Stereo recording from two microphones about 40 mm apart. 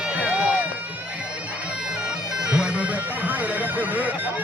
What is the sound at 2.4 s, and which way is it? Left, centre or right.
Bagpipes, right.